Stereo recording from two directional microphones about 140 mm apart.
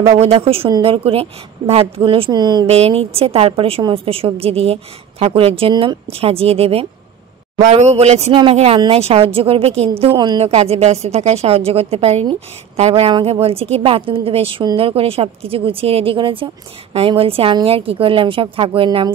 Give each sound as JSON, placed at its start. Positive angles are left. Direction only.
{"t": 0.1, "sound": "a woman's voice", "side_deg": -45}
{"t": 2.6, "sound": "a woman's voice", "side_deg": -45}
{"t": 10.1, "sound": "a woman's voice", "side_deg": -30}
{"t": 10.4, "sound": "a woman's voice", "side_deg": -50}